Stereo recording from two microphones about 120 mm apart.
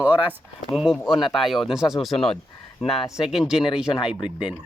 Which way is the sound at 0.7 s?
Centre (ahead or behind).